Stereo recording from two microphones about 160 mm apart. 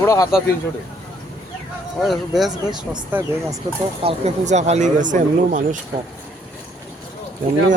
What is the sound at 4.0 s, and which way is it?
Speech, 40° right (ahead or behind).